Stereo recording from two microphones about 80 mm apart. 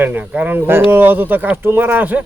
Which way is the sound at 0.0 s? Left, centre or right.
Right.